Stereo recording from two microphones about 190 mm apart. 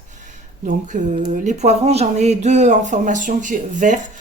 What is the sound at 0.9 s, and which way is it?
Speech, 45° right (ahead or behind).